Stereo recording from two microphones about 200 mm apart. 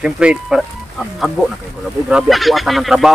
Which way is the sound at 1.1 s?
Centre (ahead or behind).